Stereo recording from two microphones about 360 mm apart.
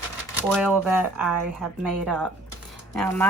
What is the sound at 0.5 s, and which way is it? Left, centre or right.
Speech, centre.